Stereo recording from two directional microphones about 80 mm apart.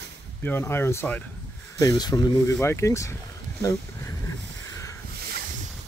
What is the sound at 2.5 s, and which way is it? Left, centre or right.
Speech, left.